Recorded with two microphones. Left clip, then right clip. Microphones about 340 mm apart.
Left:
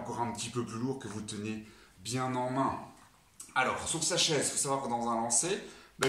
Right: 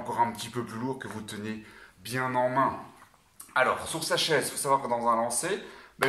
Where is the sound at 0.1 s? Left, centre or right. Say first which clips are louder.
Right 9 dB; centre.